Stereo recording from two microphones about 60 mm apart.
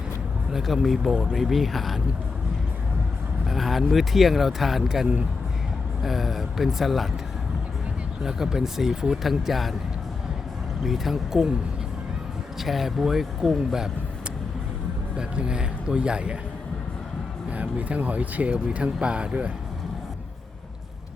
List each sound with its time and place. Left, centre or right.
0.5 s speech: centre
3.4 s speech: centre
8.2 s speech: centre
10.8 s speech: centre
12.5 s speech: centre
15.1 s speech: centre
17.5 s speech: right